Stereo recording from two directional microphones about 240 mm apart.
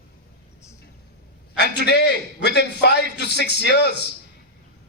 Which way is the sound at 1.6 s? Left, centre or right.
Left.